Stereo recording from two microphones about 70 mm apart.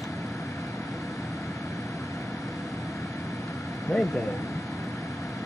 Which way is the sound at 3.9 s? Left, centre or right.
Left.